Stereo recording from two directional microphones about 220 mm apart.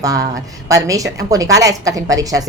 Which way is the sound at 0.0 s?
15° right (ahead or behind).